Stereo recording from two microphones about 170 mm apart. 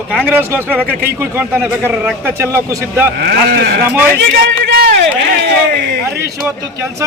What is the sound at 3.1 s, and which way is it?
Speech, 70° right (ahead or behind).